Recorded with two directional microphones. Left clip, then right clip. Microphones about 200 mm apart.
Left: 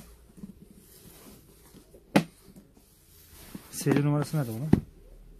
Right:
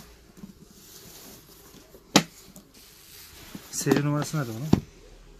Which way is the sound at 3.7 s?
40° left (ahead or behind).